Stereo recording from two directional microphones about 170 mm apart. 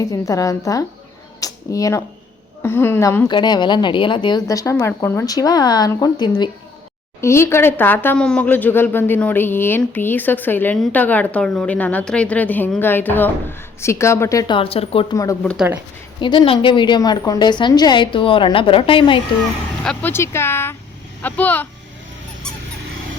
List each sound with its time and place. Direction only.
0.0 s speech: 20° left (ahead or behind)
1.4 s a sound: 20° left (ahead or behind)
2.6 s a woman's voice: 15° left (ahead or behind); by 15.2 s 35° left (ahead or behind)
15.5 s speech: 10° right (ahead or behind)
16.2 s speech: 25° left (ahead or behind)
19.8 s a woman's voice: 5° left (ahead or behind)